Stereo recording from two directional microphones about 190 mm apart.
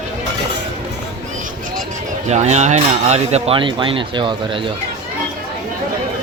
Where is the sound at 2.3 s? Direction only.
35° right (ahead or behind).